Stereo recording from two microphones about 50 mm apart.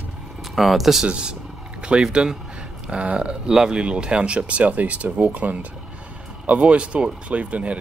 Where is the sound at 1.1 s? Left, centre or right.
Centre.